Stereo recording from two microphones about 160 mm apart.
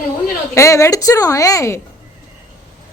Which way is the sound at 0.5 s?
20° left (ahead or behind).